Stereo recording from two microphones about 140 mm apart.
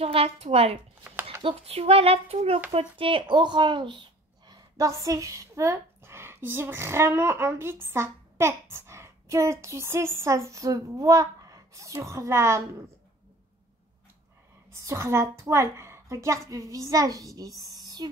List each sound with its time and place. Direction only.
0.0 s a child's voice: 45° right (ahead or behind)
4.5 s a woman's voice: 25° right (ahead or behind)
14.7 s a woman's voice: 20° right (ahead or behind)